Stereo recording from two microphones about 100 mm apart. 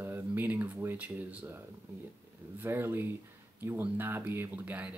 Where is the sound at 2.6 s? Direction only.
20° right (ahead or behind).